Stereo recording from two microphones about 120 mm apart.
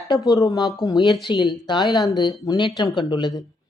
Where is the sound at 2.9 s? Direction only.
40° left (ahead or behind).